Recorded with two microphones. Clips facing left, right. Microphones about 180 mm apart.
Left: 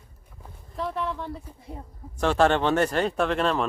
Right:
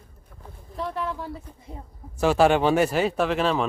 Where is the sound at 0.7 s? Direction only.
Centre (ahead or behind).